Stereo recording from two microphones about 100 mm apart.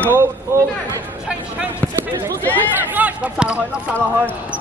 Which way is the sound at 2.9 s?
15° right (ahead or behind).